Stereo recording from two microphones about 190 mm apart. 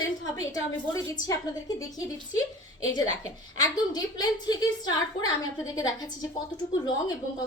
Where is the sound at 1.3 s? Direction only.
20° left (ahead or behind).